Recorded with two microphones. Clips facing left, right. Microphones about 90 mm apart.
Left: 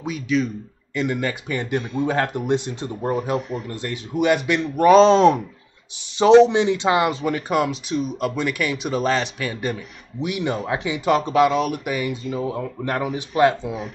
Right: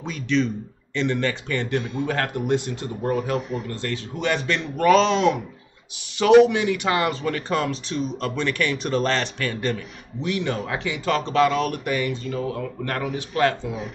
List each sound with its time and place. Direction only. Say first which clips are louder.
0.0 s speech: left 1 dB; 5° left (ahead or behind)
4.9 s speech: left 7 dB; 35° left (ahead or behind)
6.1 s speech: left 2 dB; 25° left (ahead or behind)
11.1 s speech: left 1 dB; 5° left (ahead or behind)
12.4 s speech: left 2 dB; 20° left (ahead or behind)